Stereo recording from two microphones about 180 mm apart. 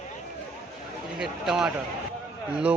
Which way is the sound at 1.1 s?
5° right (ahead or behind).